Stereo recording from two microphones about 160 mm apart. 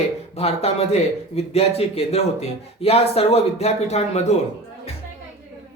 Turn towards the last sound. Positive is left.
turn(degrees=45)  # may be behind; listen again after turning